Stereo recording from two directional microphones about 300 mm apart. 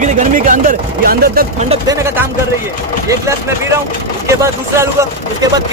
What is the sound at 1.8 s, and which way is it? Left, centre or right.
A man's voice, centre.